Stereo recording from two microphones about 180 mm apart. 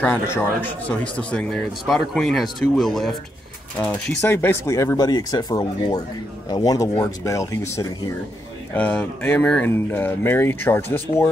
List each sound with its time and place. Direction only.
0.0 s speech: 10° left (ahead or behind)